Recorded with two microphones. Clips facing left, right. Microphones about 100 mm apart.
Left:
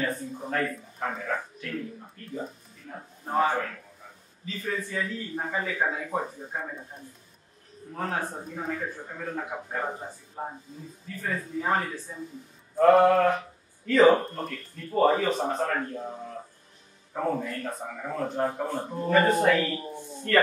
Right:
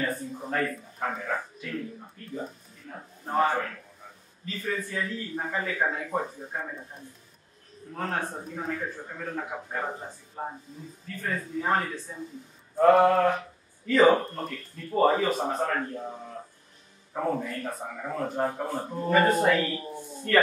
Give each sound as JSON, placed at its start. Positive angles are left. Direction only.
{"t": 0.0, "sound": "a sound", "side_deg": 0}
{"t": 4.7, "sound": "speech", "side_deg": 5}
{"t": 7.9, "sound": "speech", "side_deg": 5}